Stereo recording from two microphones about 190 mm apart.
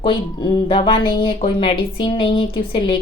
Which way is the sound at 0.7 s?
30° left (ahead or behind).